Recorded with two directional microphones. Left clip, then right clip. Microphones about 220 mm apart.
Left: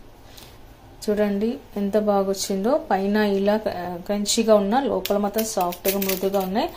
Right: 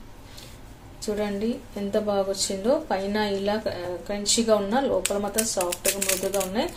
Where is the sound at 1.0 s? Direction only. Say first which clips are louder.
Left 5 dB; 30° left (ahead or behind).